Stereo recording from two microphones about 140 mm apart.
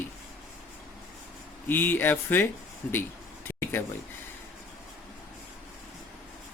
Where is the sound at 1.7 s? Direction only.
15° left (ahead or behind).